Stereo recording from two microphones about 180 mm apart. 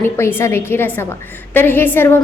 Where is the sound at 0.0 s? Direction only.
15° left (ahead or behind).